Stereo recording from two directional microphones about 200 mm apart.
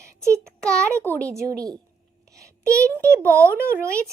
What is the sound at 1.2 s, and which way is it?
Speech, 15° right (ahead or behind).